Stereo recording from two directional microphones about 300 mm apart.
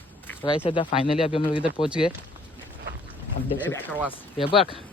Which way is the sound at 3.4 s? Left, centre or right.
Left.